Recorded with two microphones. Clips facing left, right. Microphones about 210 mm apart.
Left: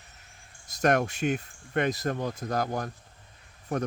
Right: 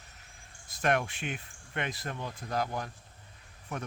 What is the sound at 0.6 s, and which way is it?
Speech, 40° left (ahead or behind).